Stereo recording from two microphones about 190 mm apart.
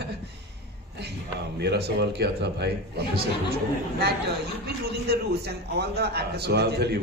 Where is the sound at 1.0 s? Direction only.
60° right (ahead or behind).